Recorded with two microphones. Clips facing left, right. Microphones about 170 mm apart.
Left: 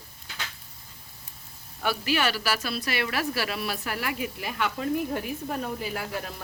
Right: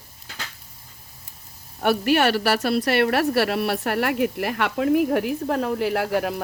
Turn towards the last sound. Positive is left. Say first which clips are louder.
# right 11 dB
turn(degrees=-70)  # may be behind; listen again after turning